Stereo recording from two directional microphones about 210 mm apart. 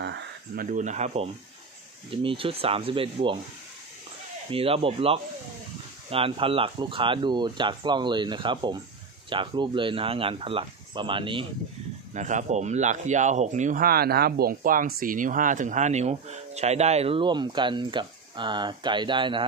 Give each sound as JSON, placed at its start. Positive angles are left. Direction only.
{"t": 0.0, "sound": "a sound", "side_deg": -55}
{"t": 0.7, "sound": "speech", "side_deg": -35}
{"t": 4.5, "sound": "speech", "side_deg": -25}
{"t": 12.1, "sound": "speech", "side_deg": -35}